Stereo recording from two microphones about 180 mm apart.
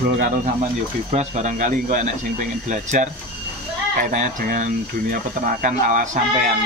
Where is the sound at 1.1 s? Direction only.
40° right (ahead or behind).